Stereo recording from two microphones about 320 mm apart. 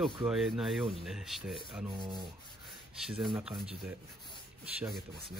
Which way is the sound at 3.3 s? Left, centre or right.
Centre.